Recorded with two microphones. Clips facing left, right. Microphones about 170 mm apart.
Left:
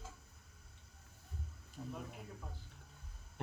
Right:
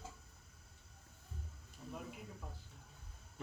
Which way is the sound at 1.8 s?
65° left (ahead or behind).